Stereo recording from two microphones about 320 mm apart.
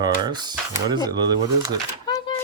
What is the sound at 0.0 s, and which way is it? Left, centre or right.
Speech, centre.